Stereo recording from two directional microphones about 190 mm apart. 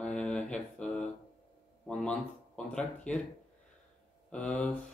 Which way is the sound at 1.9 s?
5° left (ahead or behind).